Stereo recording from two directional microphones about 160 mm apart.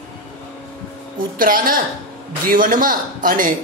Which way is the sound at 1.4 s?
60° right (ahead or behind).